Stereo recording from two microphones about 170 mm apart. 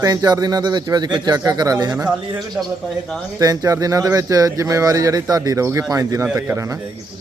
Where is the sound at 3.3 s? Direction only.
20° right (ahead or behind).